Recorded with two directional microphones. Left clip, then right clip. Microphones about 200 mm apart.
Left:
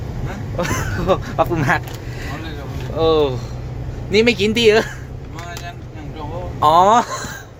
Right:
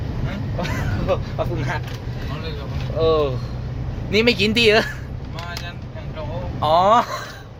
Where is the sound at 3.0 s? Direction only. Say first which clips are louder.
Left 3 dB; 15° left (ahead or behind).